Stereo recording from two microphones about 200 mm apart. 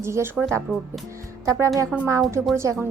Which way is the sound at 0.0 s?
10° right (ahead or behind).